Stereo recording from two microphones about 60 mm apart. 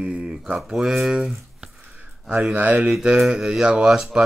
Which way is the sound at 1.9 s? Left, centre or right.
Right.